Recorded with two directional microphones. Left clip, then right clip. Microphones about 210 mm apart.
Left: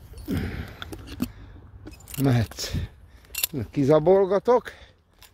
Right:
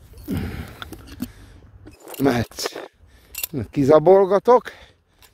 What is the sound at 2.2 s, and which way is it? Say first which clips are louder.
Speech: right 6 dB; 45° right (ahead or behind).